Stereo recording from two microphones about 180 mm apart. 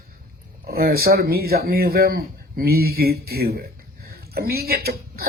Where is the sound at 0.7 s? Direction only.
55° right (ahead or behind).